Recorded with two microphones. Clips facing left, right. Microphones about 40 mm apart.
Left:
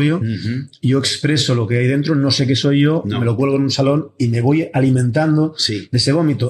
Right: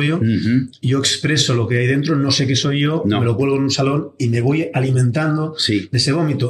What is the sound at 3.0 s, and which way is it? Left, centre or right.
Speech, centre.